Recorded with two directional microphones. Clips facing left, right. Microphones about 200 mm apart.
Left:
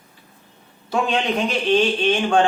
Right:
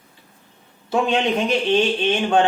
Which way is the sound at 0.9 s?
20° right (ahead or behind).